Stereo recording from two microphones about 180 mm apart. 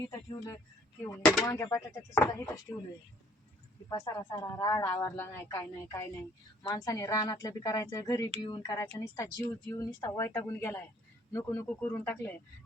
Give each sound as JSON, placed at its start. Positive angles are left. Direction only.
{"t": 1.0, "sound": "speech", "side_deg": 10}
{"t": 3.8, "sound": "a woman's voice", "side_deg": 15}